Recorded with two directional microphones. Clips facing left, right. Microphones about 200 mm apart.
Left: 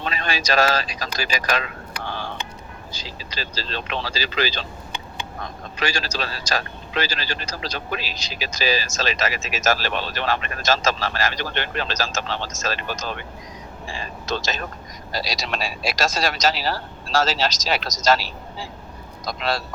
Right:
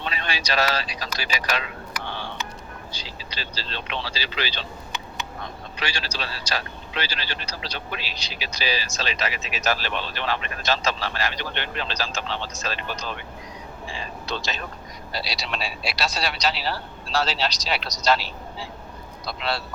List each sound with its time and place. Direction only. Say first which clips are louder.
0.0 s a man's voice: left 4 dB; 45° left (ahead or behind)
1.9 s a sound: left 2 dB; 35° left (ahead or behind)
2.9 s a man's voice: left 3 dB; 45° left (ahead or behind)
14.3 s a man's voice: left 5 dB; 45° left (ahead or behind)
19.2 s a man's voice: left 3 dB; 45° left (ahead or behind)